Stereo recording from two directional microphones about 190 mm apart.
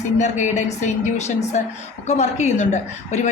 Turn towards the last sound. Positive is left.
turn(degrees=40)  # may be behind; listen again after turning